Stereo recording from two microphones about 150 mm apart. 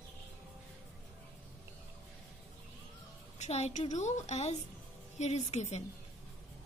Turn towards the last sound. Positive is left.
turn(degrees=45)  # may be behind; listen again after turning